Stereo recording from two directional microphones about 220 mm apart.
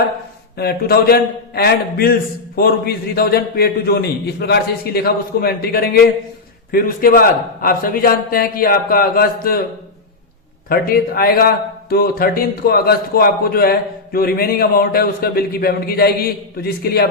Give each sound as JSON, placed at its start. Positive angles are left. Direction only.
{"t": 0.5, "sound": "a man's voice", "side_deg": 45}
{"t": 10.7, "sound": "speech", "side_deg": 45}